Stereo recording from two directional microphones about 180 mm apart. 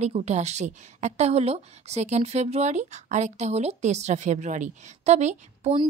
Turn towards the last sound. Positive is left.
turn(degrees=-40)  # may be behind; listen again after turning